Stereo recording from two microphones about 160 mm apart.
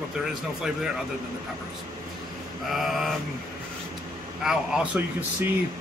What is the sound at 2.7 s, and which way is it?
Speech, centre (ahead or behind).